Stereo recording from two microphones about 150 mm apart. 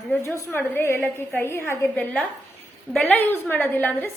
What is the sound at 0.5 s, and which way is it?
A woman's voice, 15° left (ahead or behind).